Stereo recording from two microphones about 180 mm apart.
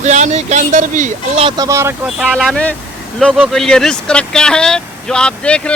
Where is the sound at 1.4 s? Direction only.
25° right (ahead or behind).